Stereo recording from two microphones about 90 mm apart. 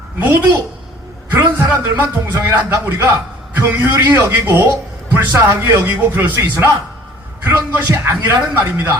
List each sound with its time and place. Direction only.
0.2 s speech: 20° right (ahead or behind)